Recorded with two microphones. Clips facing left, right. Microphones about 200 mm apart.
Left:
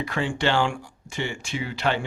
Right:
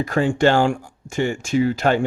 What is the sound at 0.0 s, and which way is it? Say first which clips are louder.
Speech: right 8 dB; 45° right (ahead or behind).